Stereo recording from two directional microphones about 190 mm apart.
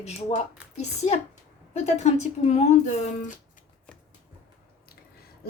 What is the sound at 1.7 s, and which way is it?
Speech, 35° left (ahead or behind).